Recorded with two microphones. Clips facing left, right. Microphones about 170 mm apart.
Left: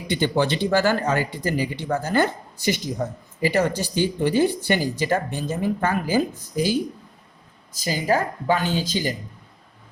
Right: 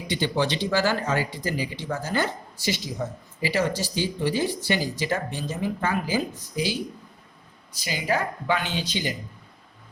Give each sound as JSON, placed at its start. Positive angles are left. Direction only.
{"t": 0.1, "sound": "speech", "side_deg": 50}
{"t": 7.9, "sound": "speech", "side_deg": 40}